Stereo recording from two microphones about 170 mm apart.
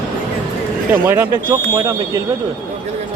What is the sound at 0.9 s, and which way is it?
Speech, 10° right (ahead or behind).